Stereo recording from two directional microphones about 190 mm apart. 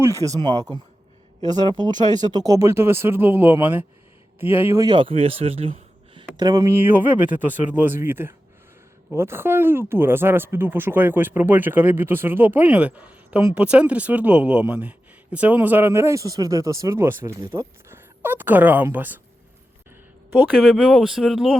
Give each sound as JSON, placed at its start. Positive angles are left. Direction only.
{"t": 0.0, "sound": "speech", "side_deg": -15}
{"t": 20.6, "sound": "speech", "side_deg": 0}